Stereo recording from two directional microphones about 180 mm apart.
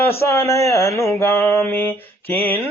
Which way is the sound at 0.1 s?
15° left (ahead or behind).